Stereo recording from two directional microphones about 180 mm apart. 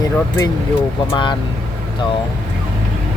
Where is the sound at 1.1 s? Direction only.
25° left (ahead or behind).